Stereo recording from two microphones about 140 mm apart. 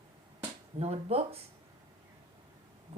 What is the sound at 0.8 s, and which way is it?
Speech, 45° right (ahead or behind).